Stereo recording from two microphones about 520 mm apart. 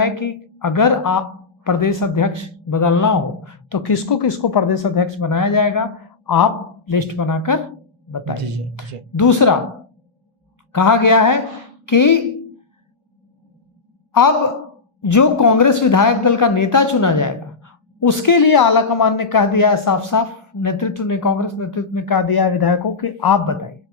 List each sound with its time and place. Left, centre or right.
0.0 s speech: left
10.7 s speech: left
14.1 s a woman's voice: left